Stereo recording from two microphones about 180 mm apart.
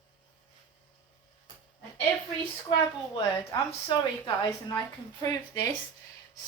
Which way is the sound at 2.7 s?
25° left (ahead or behind).